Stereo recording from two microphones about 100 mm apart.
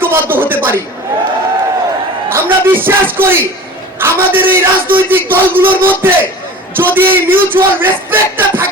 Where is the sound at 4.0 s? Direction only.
20° right (ahead or behind).